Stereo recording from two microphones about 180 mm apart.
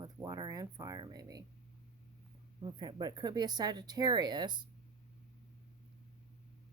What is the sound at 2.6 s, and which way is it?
Speech, 25° right (ahead or behind).